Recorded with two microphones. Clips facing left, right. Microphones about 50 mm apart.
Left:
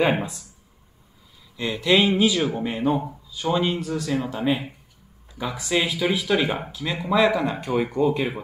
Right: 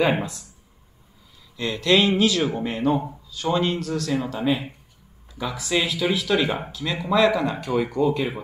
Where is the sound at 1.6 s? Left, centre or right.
Centre.